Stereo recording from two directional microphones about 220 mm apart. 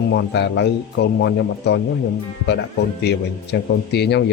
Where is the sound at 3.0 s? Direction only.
50° left (ahead or behind).